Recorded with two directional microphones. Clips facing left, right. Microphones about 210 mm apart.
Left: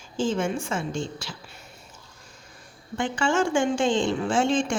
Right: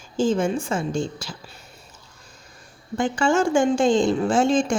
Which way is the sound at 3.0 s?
40° right (ahead or behind).